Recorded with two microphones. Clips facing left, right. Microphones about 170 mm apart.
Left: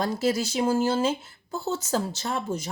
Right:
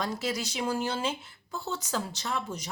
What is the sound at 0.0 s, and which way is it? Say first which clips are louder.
Speech: left 7 dB; 45° left (ahead or behind).